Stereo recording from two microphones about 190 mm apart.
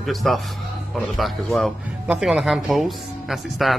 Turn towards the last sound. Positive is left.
turn(degrees=0)  # may be behind; listen again after turning